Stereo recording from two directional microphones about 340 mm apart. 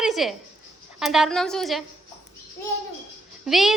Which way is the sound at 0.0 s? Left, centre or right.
Centre.